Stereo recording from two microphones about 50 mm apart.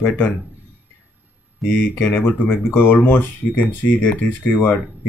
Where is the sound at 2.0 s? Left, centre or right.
Left.